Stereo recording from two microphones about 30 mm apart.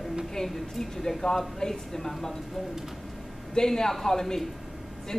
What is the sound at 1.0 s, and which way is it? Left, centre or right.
Speech, centre.